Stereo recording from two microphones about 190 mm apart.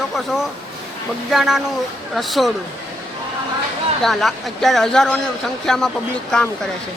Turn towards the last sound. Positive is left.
turn(degrees=5)  # may be behind; listen again after turning